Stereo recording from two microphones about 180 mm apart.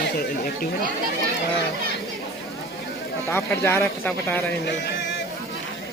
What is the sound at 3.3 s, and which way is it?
Speech, 10° left (ahead or behind).